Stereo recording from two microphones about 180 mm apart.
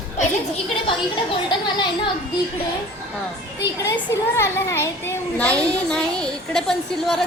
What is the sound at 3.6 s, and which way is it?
A child's voice, 15° left (ahead or behind).